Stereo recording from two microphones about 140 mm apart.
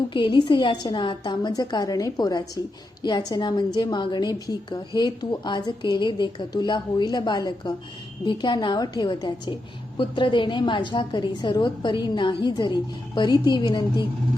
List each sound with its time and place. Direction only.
0.1 s a woman's voice: 35° left (ahead or behind)